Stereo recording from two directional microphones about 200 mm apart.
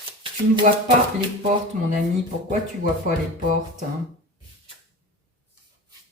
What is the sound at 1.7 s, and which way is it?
Speech, 40° right (ahead or behind).